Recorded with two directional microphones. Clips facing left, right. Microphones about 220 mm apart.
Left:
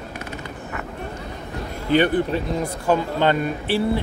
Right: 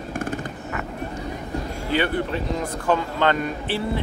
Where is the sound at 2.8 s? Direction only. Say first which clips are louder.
Left 2 dB; 10° left (ahead or behind).